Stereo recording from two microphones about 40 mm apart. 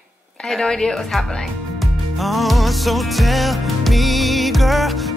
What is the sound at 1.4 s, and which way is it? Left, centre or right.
Music, centre.